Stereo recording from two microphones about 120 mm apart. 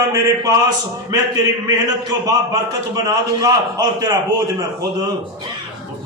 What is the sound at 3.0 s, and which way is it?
A man's voice, 30° right (ahead or behind).